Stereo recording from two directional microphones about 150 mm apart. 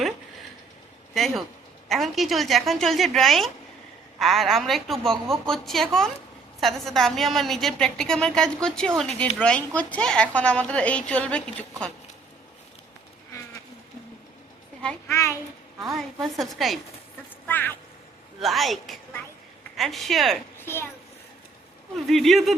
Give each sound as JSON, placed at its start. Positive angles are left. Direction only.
{"t": 1.1, "sound": "a woman's voice", "side_deg": 0}
{"t": 14.8, "sound": "a woman's voice", "side_deg": 5}
{"t": 15.1, "sound": "a child's voice", "side_deg": 20}
{"t": 16.4, "sound": "a woman's voice", "side_deg": 0}
{"t": 17.4, "sound": "quack", "side_deg": 10}
{"t": 18.3, "sound": "a woman's voice", "side_deg": 0}
{"t": 20.7, "sound": "a woman's voice", "side_deg": 15}
{"t": 21.9, "sound": "a woman's voice", "side_deg": 0}